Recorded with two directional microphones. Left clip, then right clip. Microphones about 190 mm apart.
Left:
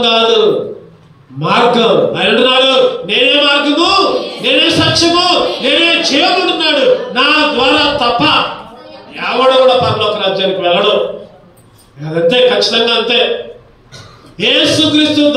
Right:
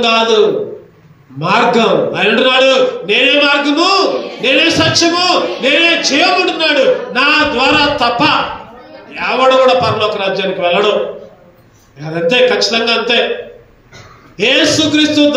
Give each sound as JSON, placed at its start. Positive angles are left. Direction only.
{"t": 0.0, "sound": "a man's voice", "side_deg": -35}
{"t": 1.4, "sound": "a man's voice", "side_deg": -35}
{"t": 12.0, "sound": "a man's voice", "side_deg": -35}
{"t": 14.3, "sound": "a man's voice", "side_deg": -35}